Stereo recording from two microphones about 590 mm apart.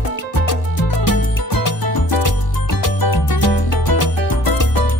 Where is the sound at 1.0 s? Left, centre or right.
Left.